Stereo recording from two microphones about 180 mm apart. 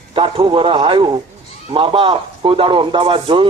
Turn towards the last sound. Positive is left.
turn(degrees=-30)  # may be behind; listen again after turning